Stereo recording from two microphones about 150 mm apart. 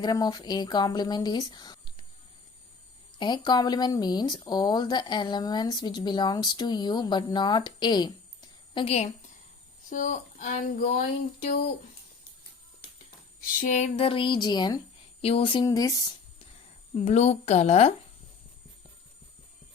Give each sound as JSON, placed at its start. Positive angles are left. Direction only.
{"t": 0.0, "sound": "speech", "side_deg": 25}
{"t": 3.2, "sound": "speech", "side_deg": 30}
{"t": 9.9, "sound": "speech", "side_deg": 60}
{"t": 13.6, "sound": "speech", "side_deg": 55}
{"t": 15.2, "sound": "speech", "side_deg": 40}
{"t": 15.6, "sound": "speech", "side_deg": 25}
{"t": 16.9, "sound": "a woman's voice", "side_deg": 45}